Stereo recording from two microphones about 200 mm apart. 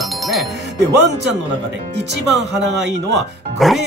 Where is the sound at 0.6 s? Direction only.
60° right (ahead or behind).